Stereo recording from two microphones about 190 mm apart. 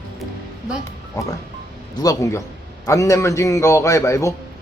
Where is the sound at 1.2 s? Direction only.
15° left (ahead or behind).